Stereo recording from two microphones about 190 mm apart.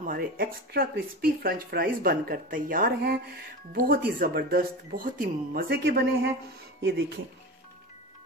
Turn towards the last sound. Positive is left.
turn(degrees=-65)  # may be behind; listen again after turning